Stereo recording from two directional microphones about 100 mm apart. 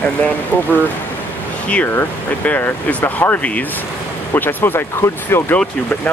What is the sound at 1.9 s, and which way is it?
Speech, 15° left (ahead or behind).